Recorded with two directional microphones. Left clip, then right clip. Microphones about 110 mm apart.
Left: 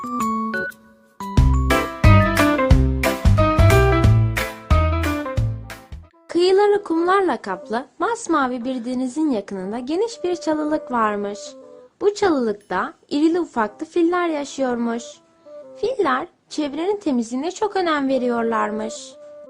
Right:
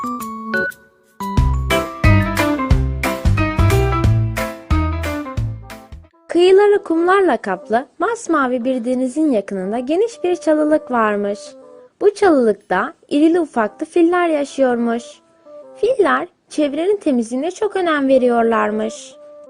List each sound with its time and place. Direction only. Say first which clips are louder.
0.0 s music: left 2 dB; centre (ahead or behind)
6.2 s music: right 5 dB; 30° right (ahead or behind)
7.0 s a woman's voice: right 4 dB; 30° right (ahead or behind)
9.0 s a woman's voice: right 2 dB; centre (ahead or behind)
9.3 s a woman's voice: right 6 dB; 30° right (ahead or behind)
17.4 s speech: right 1 dB; 10° right (ahead or behind)
18.1 s a woman's voice: right 7 dB; 35° right (ahead or behind)